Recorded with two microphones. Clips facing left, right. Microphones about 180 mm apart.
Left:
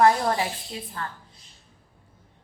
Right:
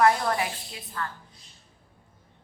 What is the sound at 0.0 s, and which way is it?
A woman's voice, 30° left (ahead or behind).